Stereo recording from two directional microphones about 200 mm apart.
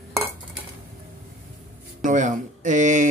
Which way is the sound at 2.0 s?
40° right (ahead or behind).